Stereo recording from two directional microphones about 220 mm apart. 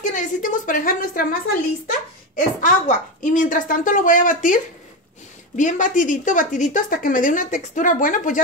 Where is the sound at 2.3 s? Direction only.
35° left (ahead or behind).